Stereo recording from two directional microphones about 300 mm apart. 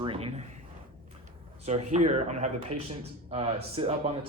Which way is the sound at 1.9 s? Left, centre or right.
Right.